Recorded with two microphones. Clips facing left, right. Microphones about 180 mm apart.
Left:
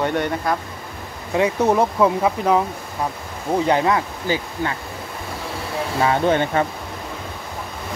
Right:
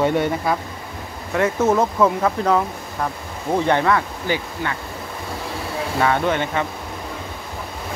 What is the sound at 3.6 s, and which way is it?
Speech, 15° left (ahead or behind).